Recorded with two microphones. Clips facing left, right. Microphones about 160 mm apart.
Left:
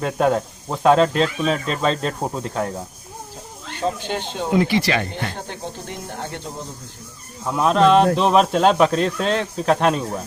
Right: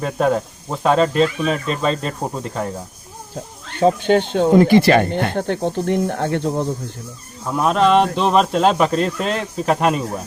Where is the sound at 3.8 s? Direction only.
55° right (ahead or behind).